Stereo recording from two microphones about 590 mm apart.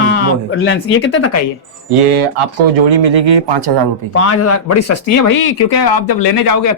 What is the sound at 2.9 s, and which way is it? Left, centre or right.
Speech, right.